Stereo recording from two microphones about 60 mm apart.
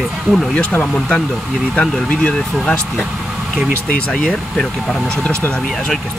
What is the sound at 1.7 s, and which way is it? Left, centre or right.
Speech, centre.